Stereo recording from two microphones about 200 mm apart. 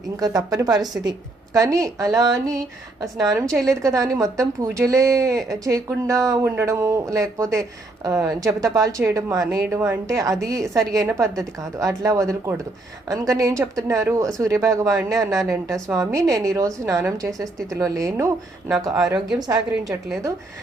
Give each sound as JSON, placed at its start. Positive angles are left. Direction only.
{"t": 0.2, "sound": "a woman's voice", "side_deg": -20}
{"t": 19.4, "sound": "a woman's voice", "side_deg": -20}